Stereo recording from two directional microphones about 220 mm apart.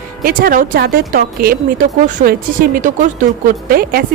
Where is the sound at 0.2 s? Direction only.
40° right (ahead or behind).